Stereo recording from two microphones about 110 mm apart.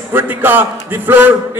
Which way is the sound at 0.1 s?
20° right (ahead or behind).